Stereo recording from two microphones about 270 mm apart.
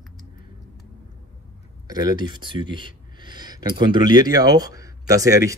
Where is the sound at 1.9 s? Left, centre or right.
Centre.